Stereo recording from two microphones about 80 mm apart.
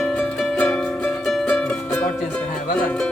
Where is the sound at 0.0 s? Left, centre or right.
Centre.